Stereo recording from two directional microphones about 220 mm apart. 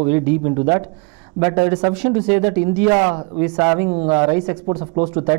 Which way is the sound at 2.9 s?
25° right (ahead or behind).